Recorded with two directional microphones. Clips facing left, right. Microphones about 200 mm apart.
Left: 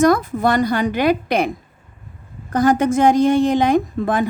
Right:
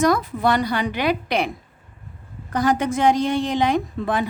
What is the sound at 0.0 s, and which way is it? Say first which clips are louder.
A woman's voice: left 4 dB; 50° left (ahead or behind).